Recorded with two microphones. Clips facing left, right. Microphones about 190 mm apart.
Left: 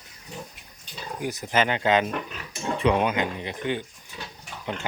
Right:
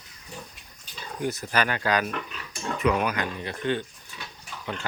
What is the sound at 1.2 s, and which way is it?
Speech, 15° left (ahead or behind).